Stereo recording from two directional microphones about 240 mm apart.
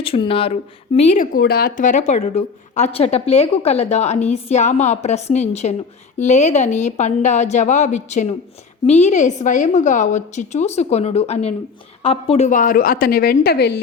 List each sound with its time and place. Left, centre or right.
0.0 s a woman's voice: left